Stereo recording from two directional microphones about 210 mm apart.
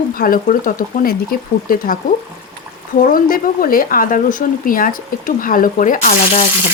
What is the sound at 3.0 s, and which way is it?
Speech, 40° left (ahead or behind).